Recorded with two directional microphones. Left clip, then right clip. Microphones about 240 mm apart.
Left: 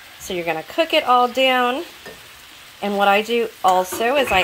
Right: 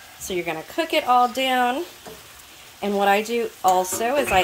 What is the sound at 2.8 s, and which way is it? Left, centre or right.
Speech, centre.